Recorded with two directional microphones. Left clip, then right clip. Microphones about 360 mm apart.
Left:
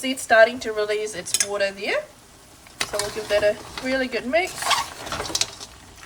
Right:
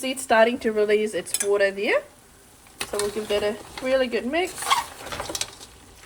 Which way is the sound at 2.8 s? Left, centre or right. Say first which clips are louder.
Left 1 dB; centre.